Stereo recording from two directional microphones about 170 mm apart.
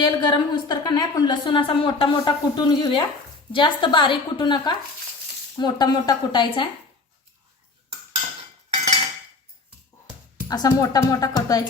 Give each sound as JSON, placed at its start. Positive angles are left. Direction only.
{"t": 0.0, "sound": "a woman's voice", "side_deg": 25}
{"t": 10.5, "sound": "a woman's voice", "side_deg": 20}